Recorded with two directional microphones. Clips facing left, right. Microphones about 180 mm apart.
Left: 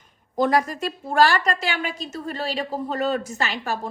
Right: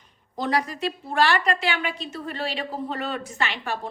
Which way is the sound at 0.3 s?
50° left (ahead or behind).